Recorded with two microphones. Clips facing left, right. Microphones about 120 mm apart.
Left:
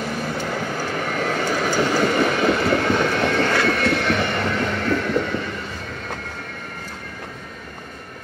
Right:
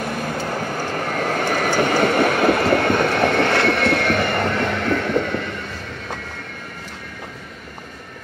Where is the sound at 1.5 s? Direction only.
55° right (ahead or behind).